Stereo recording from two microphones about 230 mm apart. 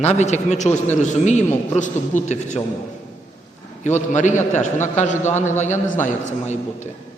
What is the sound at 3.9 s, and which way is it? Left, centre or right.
A man's voice, left.